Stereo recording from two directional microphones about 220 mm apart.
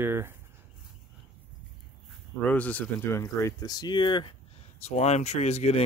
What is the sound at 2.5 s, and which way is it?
Speech, 5° left (ahead or behind).